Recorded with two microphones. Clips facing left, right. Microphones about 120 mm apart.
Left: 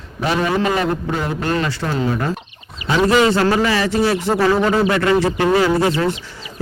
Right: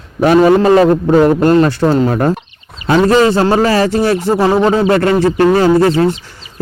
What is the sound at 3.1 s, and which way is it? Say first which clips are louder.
A man's voice: right 3 dB; 35° right (ahead or behind).